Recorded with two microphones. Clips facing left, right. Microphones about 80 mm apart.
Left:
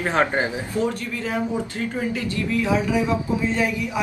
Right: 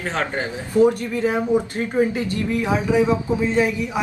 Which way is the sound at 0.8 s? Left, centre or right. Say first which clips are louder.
Right 9 dB; right.